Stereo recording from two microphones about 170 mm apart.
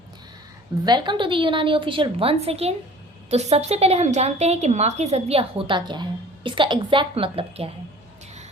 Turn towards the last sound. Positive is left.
turn(degrees=-35)  # may be behind; listen again after turning